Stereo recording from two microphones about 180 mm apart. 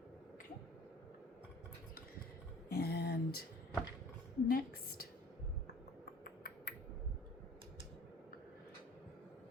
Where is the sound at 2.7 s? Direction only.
65° left (ahead or behind).